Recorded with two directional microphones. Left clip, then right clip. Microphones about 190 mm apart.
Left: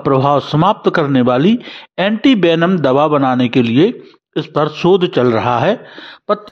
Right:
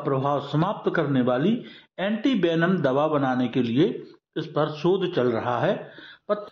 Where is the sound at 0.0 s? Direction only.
45° left (ahead or behind).